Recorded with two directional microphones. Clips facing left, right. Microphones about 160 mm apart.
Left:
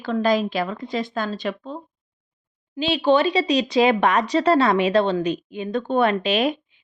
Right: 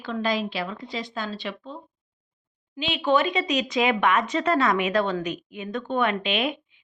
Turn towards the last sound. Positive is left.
turn(degrees=40)  # may be behind; listen again after turning